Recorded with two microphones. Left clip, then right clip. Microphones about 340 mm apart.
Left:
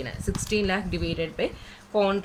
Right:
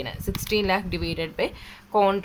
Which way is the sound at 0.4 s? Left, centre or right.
Centre.